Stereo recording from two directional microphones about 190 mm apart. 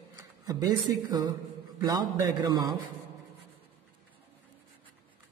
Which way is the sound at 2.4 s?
20° right (ahead or behind).